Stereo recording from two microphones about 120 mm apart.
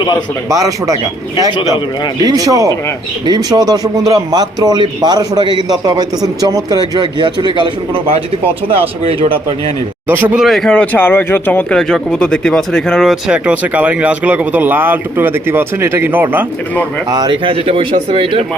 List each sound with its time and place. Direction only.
0.5 s speech: 30° right (ahead or behind)
2.2 s a man's voice: 30° right (ahead or behind); by 8.2 s 50° right (ahead or behind)
10.1 s speech: 15° right (ahead or behind)
10.4 s speech: centre (ahead or behind); by 16.5 s 15° right (ahead or behind)
17.1 s speech: 40° right (ahead or behind)